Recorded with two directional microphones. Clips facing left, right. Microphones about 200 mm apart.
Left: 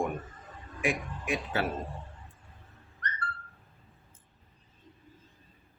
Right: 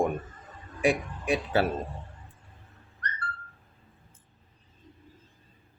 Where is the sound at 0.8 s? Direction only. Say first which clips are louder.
Right 6 dB; 35° right (ahead or behind).